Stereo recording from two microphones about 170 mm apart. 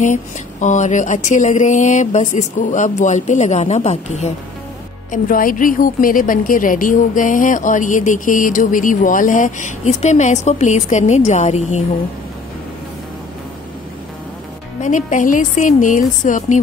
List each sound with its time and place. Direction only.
0.0 s a woman's voice: 45° left (ahead or behind)
5.1 s a woman's voice: 55° left (ahead or behind)
14.8 s a woman's voice: 45° left (ahead or behind)